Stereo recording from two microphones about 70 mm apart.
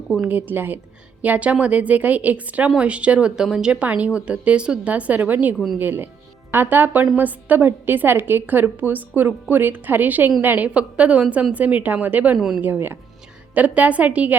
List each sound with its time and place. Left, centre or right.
0.3 s a woman's voice: right